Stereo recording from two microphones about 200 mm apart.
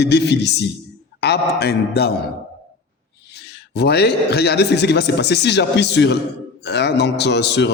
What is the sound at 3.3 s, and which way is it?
Speech, 55° left (ahead or behind).